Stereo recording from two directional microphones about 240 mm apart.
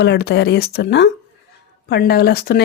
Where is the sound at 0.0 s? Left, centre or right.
Left.